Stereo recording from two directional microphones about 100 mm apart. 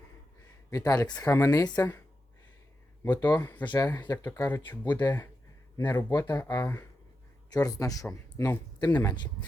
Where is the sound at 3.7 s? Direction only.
35° left (ahead or behind).